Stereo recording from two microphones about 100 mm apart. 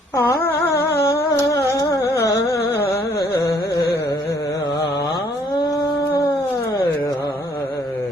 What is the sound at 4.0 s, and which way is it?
Carnatic music, 35° left (ahead or behind).